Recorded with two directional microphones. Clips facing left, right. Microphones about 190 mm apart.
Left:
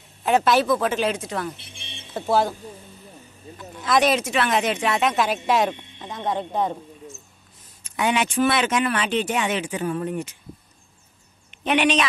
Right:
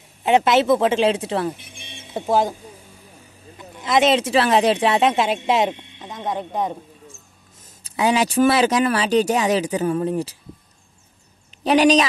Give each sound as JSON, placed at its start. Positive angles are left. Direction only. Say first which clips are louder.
{"t": 0.2, "sound": "speech", "louder": "right 3 dB", "side_deg": -20}
{"t": 1.6, "sound": "music", "louder": "right 2 dB", "side_deg": -10}
{"t": 3.5, "sound": "speech", "louder": "right 2 dB", "side_deg": -15}
{"t": 7.8, "sound": "speech", "louder": "right 4 dB", "side_deg": -35}
{"t": 11.6, "sound": "speech", "louder": "right 5 dB", "side_deg": -35}